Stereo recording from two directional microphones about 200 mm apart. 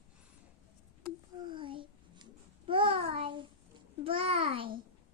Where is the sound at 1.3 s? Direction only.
25° right (ahead or behind).